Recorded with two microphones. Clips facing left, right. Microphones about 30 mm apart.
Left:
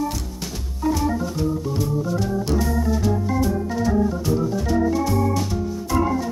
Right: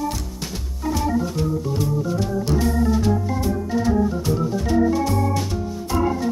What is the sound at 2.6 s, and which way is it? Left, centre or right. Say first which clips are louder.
Organ: right 2 dB; right.